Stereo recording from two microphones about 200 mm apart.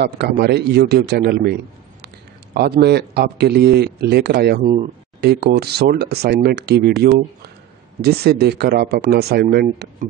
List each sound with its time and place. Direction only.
0.0 s a man's voice: 55° right (ahead or behind)